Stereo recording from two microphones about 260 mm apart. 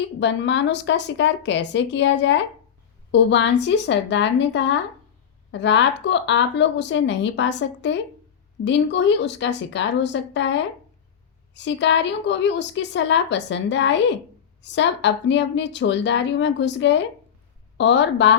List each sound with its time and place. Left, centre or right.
0.2 s a woman's voice: left